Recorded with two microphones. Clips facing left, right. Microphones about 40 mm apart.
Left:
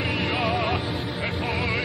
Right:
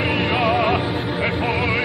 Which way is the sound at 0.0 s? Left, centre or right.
Right.